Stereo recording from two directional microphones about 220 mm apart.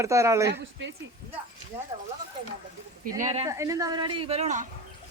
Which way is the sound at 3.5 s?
15° right (ahead or behind).